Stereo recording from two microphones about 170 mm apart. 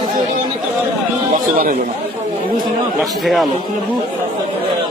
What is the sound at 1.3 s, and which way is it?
Speech, 50° right (ahead or behind).